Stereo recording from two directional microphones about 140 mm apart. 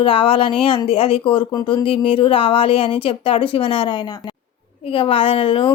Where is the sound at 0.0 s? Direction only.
40° left (ahead or behind).